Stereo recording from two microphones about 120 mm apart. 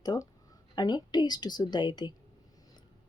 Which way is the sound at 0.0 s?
35° left (ahead or behind).